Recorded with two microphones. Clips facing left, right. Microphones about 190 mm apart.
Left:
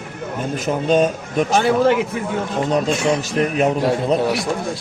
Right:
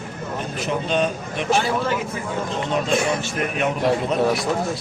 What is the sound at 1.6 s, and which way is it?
Speech, 65° left (ahead or behind).